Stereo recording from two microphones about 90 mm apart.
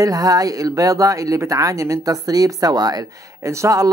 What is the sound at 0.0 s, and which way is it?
Speech, 45° right (ahead or behind).